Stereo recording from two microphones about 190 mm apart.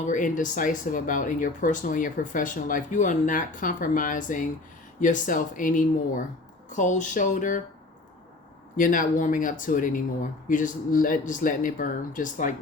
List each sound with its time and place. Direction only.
0.0 s speech: 40° left (ahead or behind)
8.7 s speech: 45° left (ahead or behind)